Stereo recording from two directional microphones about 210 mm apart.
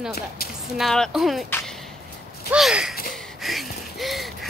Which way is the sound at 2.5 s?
5° right (ahead or behind).